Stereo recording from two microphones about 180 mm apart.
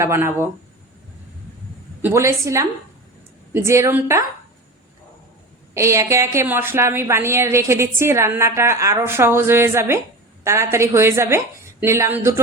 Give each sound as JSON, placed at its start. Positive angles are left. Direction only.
{"t": 0.0, "sound": "a woman's voice", "side_deg": -15}
{"t": 2.0, "sound": "a woman's voice", "side_deg": -15}
{"t": 5.7, "sound": "a woman's voice", "side_deg": -15}